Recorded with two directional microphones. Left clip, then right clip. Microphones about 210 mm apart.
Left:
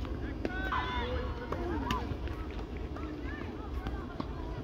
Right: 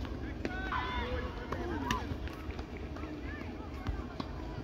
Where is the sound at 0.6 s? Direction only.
55° left (ahead or behind).